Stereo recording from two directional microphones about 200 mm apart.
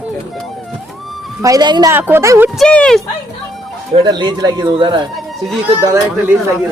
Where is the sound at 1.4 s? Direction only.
20° right (ahead or behind).